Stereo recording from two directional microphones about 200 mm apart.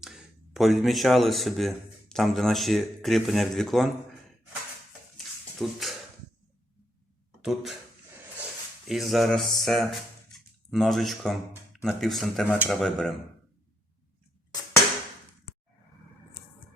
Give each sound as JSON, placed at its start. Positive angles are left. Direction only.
{"t": 0.0, "sound": "speech", "side_deg": 0}
{"t": 5.1, "sound": "a sound", "side_deg": 0}
{"t": 7.4, "sound": "speech", "side_deg": 0}
{"t": 8.9, "sound": "speech", "side_deg": 0}